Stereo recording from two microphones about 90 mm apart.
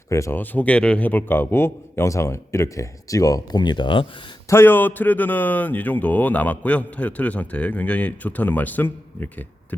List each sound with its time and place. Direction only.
0.1 s a man's voice: 35° left (ahead or behind)
0.3 s a man's voice: 15° left (ahead or behind); by 4.0 s 60° left (ahead or behind)
4.4 s a man's voice: 25° left (ahead or behind)